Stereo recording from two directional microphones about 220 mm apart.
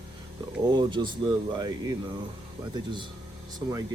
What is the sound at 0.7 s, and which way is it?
Speech, 20° right (ahead or behind).